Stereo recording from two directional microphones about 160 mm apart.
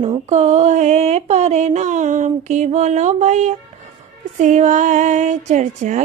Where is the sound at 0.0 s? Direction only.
40° right (ahead or behind).